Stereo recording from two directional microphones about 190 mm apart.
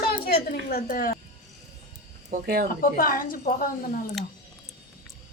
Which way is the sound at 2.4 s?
50° right (ahead or behind).